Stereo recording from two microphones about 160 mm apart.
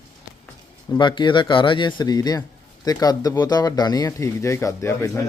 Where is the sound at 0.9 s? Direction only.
30° left (ahead or behind).